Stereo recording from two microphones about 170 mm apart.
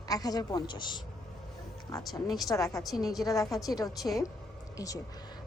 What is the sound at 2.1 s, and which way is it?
Speech, centre (ahead or behind).